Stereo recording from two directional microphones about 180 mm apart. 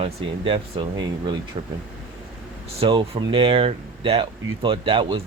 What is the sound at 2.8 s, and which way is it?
Speech, 30° right (ahead or behind).